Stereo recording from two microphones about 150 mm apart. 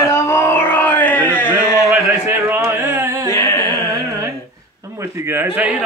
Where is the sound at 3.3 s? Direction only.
20° left (ahead or behind).